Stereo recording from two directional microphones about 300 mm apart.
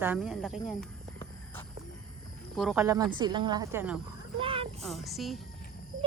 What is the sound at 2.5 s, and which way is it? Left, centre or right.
A woman's voice, centre.